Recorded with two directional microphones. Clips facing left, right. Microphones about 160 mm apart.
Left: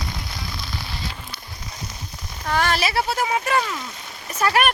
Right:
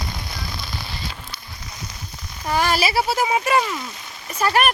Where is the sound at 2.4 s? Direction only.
5° right (ahead or behind).